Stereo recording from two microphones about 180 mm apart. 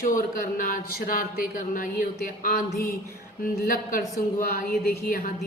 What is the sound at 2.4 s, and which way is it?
A woman's voice, 50° left (ahead or behind).